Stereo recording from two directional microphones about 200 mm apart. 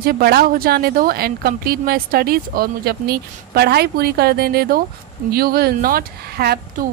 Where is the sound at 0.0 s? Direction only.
50° right (ahead or behind).